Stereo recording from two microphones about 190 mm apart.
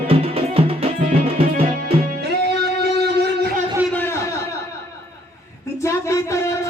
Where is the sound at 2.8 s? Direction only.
60° right (ahead or behind).